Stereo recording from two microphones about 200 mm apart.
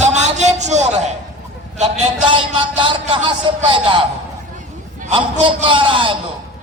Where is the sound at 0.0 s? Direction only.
35° right (ahead or behind).